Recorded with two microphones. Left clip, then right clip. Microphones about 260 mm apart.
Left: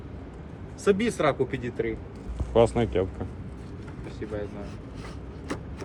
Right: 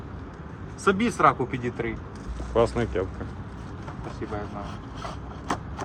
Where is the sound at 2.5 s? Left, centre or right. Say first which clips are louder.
Left 2 dB; left.